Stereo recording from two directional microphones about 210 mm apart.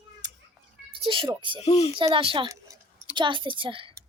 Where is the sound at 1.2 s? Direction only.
25° right (ahead or behind).